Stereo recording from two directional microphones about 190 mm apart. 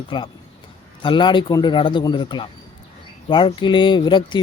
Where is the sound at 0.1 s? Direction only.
25° left (ahead or behind).